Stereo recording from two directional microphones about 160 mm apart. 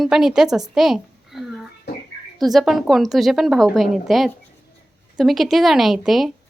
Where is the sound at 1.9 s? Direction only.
85° left.